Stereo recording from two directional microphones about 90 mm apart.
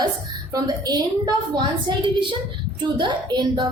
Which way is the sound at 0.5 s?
50° right (ahead or behind).